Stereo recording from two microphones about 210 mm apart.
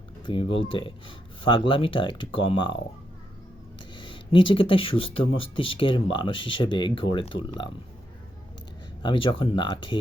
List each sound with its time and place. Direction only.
0.3 s speech: 25° left (ahead or behind)
3.9 s speech: 25° left (ahead or behind)
9.0 s speech: 25° left (ahead or behind)